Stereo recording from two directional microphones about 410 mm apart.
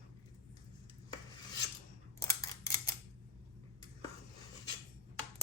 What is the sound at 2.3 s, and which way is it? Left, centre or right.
Scissors, centre.